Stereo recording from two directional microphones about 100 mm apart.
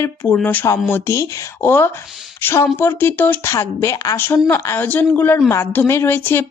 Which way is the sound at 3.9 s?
40° left (ahead or behind).